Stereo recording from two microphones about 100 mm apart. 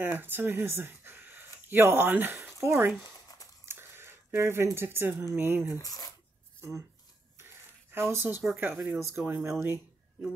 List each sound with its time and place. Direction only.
0.0 s speech: 20° right (ahead or behind)
5.8 s speech: 40° left (ahead or behind)
7.9 s speech: 25° right (ahead or behind)